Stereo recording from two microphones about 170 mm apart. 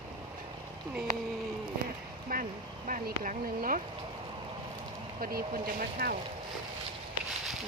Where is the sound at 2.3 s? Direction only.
60° right (ahead or behind).